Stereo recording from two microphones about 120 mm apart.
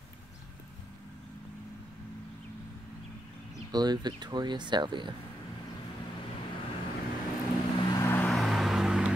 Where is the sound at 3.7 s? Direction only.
35° right (ahead or behind).